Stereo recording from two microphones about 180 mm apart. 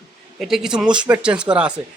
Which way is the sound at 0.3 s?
Centre (ahead or behind).